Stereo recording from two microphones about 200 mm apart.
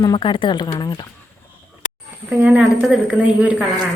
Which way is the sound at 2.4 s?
5° right (ahead or behind).